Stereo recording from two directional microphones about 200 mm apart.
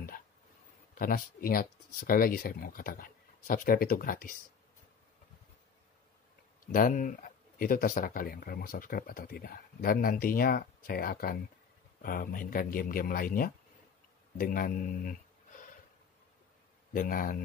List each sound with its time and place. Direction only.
0.9 s speech: 45° left (ahead or behind)
6.6 s speech: 45° left (ahead or behind)
16.9 s speech: 45° left (ahead or behind)